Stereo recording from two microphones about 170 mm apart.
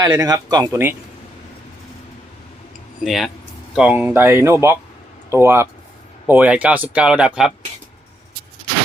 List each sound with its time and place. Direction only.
0.0 s speech: 20° right (ahead or behind)
3.0 s speech: centre (ahead or behind)